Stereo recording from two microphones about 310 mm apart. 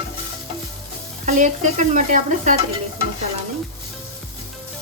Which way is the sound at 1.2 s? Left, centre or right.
Right.